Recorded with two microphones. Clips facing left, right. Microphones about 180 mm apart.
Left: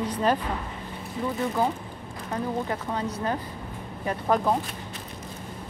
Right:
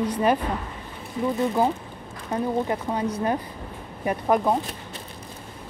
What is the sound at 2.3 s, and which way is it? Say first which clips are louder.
Speech: right 4 dB; 20° right (ahead or behind).